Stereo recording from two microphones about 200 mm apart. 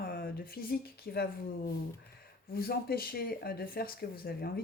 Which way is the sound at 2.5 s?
50° left (ahead or behind).